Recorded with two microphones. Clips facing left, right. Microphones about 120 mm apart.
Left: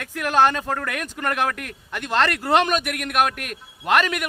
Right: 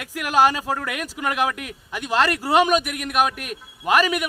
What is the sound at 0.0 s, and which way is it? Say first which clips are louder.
Speech: even; 10° right (ahead or behind).